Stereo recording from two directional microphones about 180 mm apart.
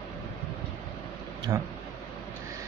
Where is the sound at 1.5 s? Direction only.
20° right (ahead or behind).